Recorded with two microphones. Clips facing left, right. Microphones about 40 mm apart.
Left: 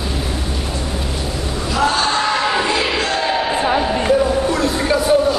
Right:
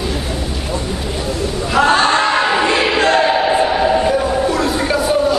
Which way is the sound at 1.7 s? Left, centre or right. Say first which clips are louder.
Right 5 dB; right.